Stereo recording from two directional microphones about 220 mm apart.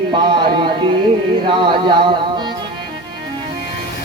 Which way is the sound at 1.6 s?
20° right (ahead or behind).